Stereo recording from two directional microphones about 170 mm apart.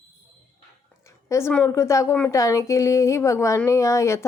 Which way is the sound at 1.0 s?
15° left (ahead or behind).